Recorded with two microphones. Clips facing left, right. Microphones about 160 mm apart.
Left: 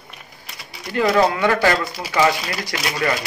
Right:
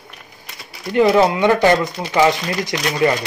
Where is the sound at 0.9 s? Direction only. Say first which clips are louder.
Right 4 dB; 20° right (ahead or behind).